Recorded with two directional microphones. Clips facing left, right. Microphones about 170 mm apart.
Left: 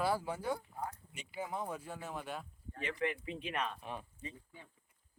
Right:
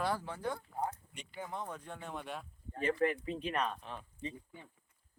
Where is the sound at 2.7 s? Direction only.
45° right (ahead or behind).